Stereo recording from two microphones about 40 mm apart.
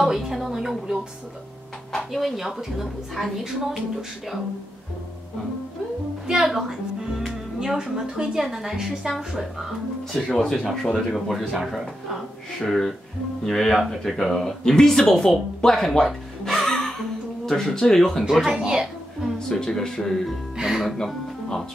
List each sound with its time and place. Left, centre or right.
0.0 s a woman's voice: centre
2.1 s a woman's voice: centre
6.2 s music: centre
7.6 s a woman's voice: centre
10.2 s a woman's voice: centre
16.1 s music: centre
17.5 s speech: centre
18.3 s a woman's voice: centre
19.5 s speech: centre
20.5 s speech: centre